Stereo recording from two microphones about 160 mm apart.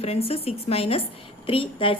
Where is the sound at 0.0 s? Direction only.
40° left (ahead or behind).